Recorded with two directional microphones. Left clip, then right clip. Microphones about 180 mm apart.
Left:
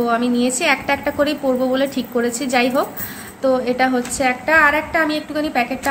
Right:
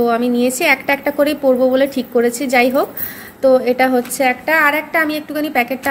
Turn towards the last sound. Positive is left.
turn(degrees=-35)  # may be behind; listen again after turning